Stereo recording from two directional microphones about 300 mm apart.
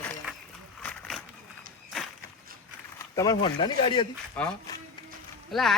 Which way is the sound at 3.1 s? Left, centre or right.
Centre.